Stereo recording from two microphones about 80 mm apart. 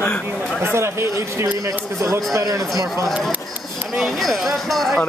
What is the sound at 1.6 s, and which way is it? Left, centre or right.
Speech, right.